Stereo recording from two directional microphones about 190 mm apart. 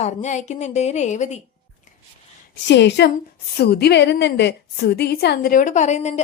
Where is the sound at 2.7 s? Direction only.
65° left (ahead or behind).